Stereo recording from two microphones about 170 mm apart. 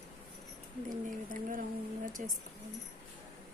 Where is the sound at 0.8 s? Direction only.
50° right (ahead or behind).